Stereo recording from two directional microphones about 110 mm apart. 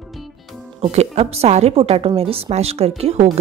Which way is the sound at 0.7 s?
75° right (ahead or behind).